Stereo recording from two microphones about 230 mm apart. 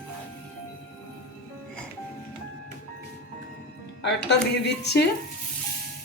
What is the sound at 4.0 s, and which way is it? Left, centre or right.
A woman's voice, left.